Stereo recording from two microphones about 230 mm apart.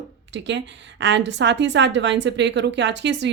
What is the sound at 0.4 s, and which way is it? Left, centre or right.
Speech, right.